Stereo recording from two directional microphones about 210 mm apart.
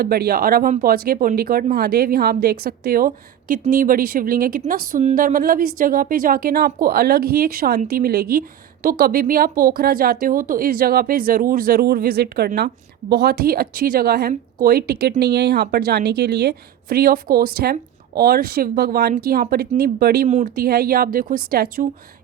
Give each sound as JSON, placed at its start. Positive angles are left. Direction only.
{"t": 0.0, "sound": "speech", "side_deg": -45}